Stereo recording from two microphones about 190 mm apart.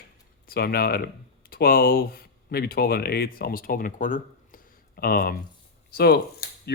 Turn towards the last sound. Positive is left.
turn(degrees=60)  # may be behind; listen again after turning